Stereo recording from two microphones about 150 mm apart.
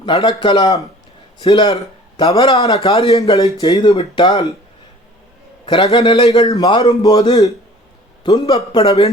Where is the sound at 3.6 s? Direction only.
30° left (ahead or behind).